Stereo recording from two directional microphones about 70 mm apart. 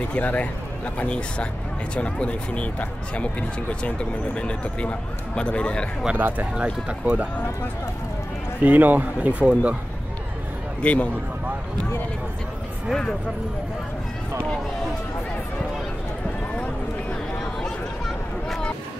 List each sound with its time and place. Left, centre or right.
0.1 s speech: centre
6.1 s speech: right
6.5 s speech: centre
8.6 s speech: right
10.8 s a man's voice: centre